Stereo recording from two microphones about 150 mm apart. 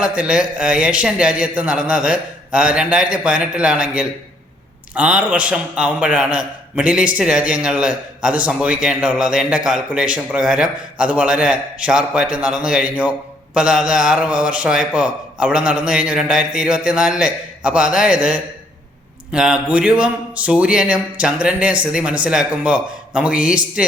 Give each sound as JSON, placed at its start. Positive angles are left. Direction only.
{"t": 0.0, "sound": "a man's voice", "side_deg": -5}